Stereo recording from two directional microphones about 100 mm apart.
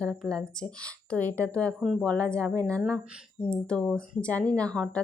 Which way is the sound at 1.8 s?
Centre (ahead or behind).